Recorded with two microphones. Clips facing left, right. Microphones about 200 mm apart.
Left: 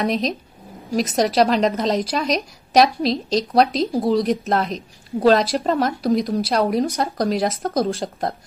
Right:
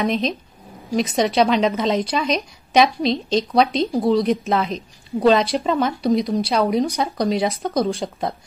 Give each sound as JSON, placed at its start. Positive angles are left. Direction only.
{"t": 0.0, "sound": "a woman's voice", "side_deg": 0}